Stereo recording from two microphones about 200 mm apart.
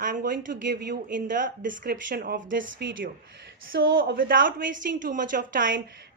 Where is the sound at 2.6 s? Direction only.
65° right (ahead or behind).